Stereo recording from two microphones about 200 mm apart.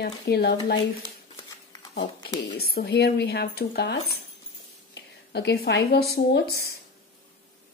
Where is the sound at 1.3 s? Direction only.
20° left (ahead or behind).